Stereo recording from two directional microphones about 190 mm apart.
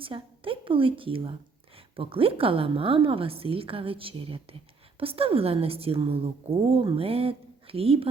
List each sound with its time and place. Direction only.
0.0 s a woman's voice: 30° right (ahead or behind)